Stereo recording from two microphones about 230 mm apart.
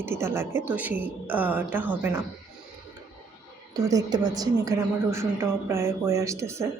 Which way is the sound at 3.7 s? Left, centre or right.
Centre.